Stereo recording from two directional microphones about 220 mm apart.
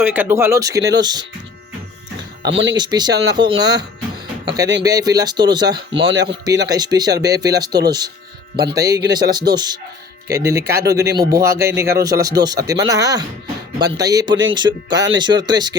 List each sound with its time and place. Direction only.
0.0 s speech: 10° right (ahead or behind)
2.4 s speech: 55° right (ahead or behind)
2.7 s speech: 20° right (ahead or behind)
5.9 s speech: 55° right (ahead or behind)
6.2 s speech: 15° right (ahead or behind)